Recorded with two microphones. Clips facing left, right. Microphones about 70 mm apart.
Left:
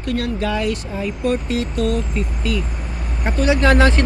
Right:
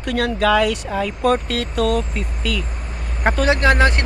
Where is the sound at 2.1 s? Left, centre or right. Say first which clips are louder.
Left 2 dB; right.